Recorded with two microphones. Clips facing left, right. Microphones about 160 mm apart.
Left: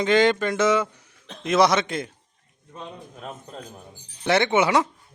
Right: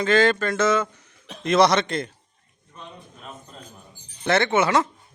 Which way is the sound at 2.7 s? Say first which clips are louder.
Left 4 dB; 45° left (ahead or behind).